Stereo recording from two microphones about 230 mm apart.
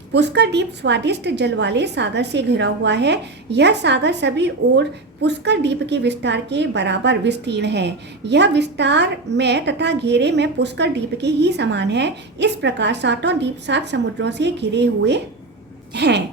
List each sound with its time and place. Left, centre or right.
0.1 s a woman's voice: right